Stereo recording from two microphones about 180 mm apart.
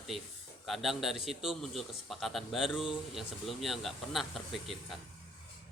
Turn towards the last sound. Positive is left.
turn(degrees=0)  # may be behind; listen again after turning